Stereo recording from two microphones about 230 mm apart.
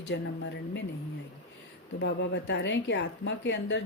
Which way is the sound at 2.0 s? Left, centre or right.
Left.